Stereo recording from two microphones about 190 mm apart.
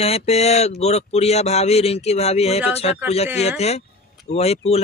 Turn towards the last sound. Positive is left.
turn(degrees=35)  # may be behind; listen again after turning